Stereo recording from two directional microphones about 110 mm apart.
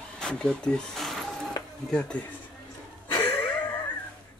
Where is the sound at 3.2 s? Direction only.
55° left (ahead or behind).